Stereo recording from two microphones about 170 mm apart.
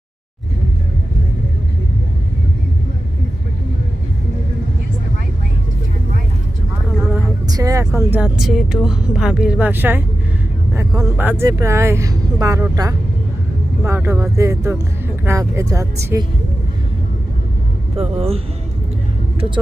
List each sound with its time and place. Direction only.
7.5 s speech: 20° right (ahead or behind)
7.9 s speech: 10° right (ahead or behind)
17.9 s speech: 35° right (ahead or behind)